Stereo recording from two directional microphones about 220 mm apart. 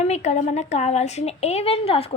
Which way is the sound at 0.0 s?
30° left (ahead or behind).